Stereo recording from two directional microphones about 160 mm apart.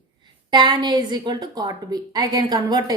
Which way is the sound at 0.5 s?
30° right (ahead or behind).